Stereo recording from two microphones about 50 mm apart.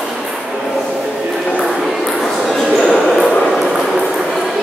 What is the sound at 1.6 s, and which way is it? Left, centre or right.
Ping, centre.